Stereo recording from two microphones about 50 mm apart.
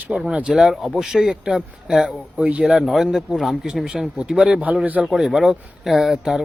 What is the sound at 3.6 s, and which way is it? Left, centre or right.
Speech, centre.